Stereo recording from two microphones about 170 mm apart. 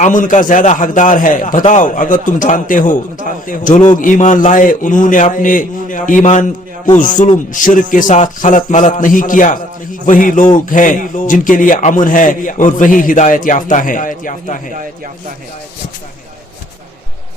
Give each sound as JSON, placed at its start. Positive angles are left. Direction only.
{"t": 0.0, "sound": "speech", "side_deg": 50}